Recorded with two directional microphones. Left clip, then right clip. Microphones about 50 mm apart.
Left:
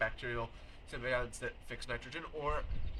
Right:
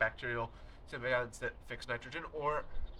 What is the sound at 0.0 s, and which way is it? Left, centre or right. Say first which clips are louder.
Speech: right 2 dB; right.